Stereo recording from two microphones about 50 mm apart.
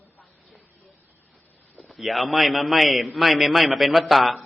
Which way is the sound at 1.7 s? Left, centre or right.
Centre.